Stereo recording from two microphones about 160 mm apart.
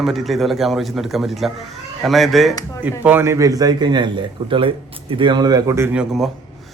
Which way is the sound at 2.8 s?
10° right (ahead or behind).